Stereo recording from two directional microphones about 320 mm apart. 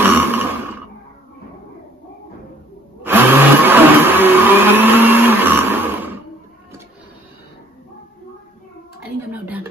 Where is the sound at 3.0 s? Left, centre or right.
Centre.